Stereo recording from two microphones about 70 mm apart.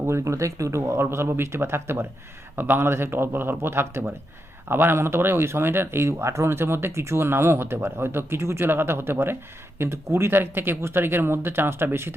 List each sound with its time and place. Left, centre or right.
0.0 s speech: right